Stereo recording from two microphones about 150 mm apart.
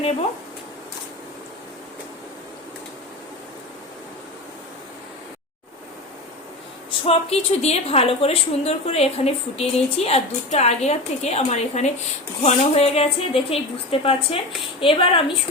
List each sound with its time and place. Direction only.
7.0 s a woman's voice: 40° left (ahead or behind)